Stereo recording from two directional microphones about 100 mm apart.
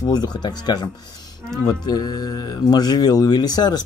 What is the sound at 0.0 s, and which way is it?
Speech, 40° left (ahead or behind).